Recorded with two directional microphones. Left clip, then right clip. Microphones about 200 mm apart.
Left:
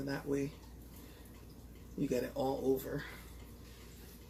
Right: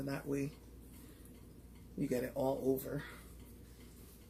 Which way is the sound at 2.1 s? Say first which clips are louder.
Left 1 dB; 25° right (ahead or behind).